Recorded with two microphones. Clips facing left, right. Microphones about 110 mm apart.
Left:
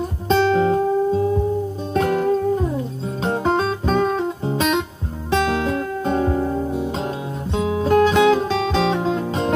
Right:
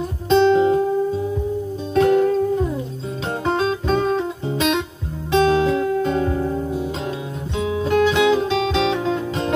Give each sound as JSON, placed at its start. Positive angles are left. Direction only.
{"t": 0.3, "sound": "music", "side_deg": 40}
{"t": 3.3, "sound": "music", "side_deg": 40}
{"t": 5.3, "sound": "guitar", "side_deg": 45}
{"t": 7.5, "sound": "music", "side_deg": 40}